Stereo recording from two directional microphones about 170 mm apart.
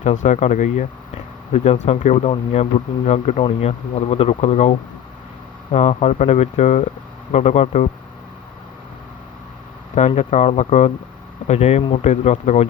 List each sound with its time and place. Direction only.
0.0 s speech: 45° left (ahead or behind)
10.2 s speech: 40° left (ahead or behind)